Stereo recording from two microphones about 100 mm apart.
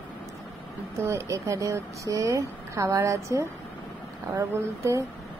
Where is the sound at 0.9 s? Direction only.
30° right (ahead or behind).